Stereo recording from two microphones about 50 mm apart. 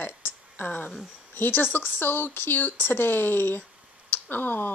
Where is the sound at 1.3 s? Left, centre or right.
Left.